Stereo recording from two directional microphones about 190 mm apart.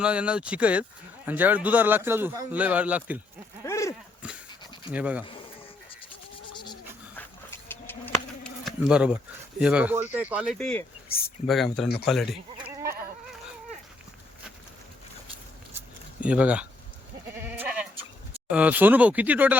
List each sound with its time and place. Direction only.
0.0 s speech: 5° right (ahead or behind)
3.6 s a sound: 15° left (ahead or behind)
4.2 s dog: 5° right (ahead or behind)
4.9 s speech: 5° right (ahead or behind)
6.5 s a sound: 25° left (ahead or behind)
7.2 s bird: 10° left (ahead or behind)
8.6 s speech: 5° right (ahead or behind)
10.6 s speech: 5° left (ahead or behind)
16.2 s speech: 5° right (ahead or behind)
17.3 s goat: 10° right (ahead or behind)
18.5 s speech: 10° right (ahead or behind)